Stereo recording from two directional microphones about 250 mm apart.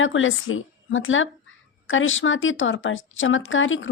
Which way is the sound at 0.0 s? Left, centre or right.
Left.